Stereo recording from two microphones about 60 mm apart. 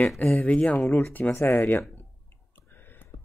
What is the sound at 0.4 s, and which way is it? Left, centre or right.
Speech, left.